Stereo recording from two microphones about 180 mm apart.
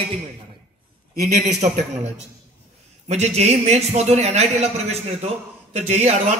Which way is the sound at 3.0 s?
35° right (ahead or behind).